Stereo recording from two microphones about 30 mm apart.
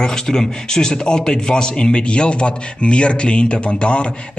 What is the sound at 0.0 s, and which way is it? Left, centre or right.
A man's voice, centre.